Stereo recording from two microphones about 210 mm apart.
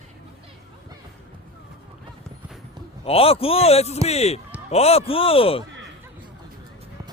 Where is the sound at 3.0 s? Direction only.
25° left (ahead or behind).